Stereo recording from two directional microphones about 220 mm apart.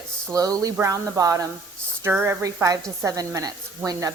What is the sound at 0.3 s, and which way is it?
A woman's voice, 15° right (ahead or behind).